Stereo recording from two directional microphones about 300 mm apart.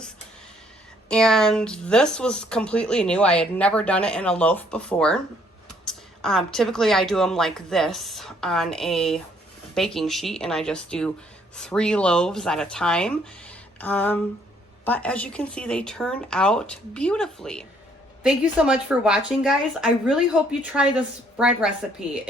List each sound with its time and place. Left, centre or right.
1.0 s speech: centre